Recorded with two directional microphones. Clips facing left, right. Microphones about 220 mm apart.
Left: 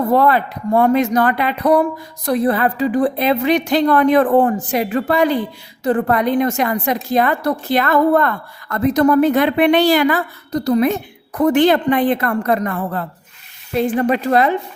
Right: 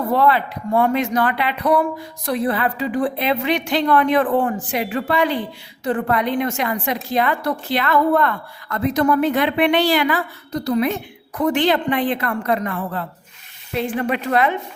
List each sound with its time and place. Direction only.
0.1 s a woman's voice: 45° left (ahead or behind)